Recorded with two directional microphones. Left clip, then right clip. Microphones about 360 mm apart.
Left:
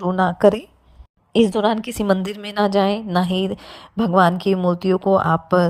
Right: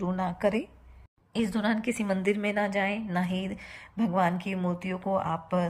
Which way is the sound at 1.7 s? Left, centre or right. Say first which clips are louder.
Left 10 dB; centre.